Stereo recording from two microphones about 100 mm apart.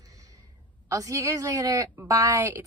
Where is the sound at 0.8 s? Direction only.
35° right (ahead or behind).